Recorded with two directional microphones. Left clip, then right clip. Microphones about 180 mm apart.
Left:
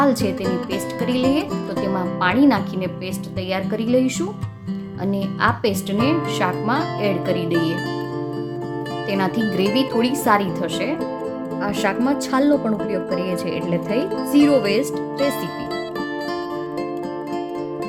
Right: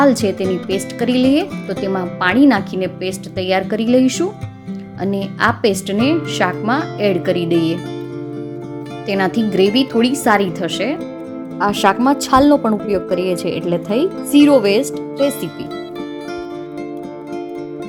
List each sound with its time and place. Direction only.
0.0 s speech: 25° right (ahead or behind)
9.0 s speech: 25° right (ahead or behind)